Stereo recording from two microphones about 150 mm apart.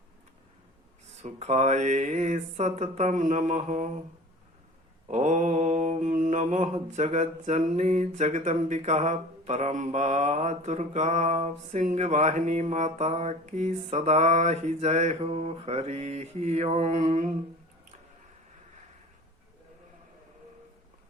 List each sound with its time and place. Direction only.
1.2 s mantra: 50° right (ahead or behind)
5.0 s mantra: 50° right (ahead or behind)